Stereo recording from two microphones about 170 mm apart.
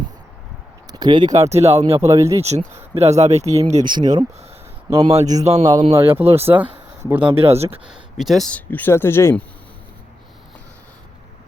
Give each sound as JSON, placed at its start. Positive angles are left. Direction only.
{"t": 0.9, "sound": "a sound", "side_deg": -25}
{"t": 1.3, "sound": "speech", "side_deg": -40}
{"t": 2.0, "sound": "speech", "side_deg": -20}
{"t": 2.4, "sound": "speech", "side_deg": -40}
{"t": 3.8, "sound": "speech", "side_deg": -25}
{"t": 5.1, "sound": "speech", "side_deg": -40}
{"t": 5.6, "sound": "speech", "side_deg": -20}
{"t": 7.3, "sound": "speech", "side_deg": -35}
{"t": 7.9, "sound": "speech", "side_deg": 0}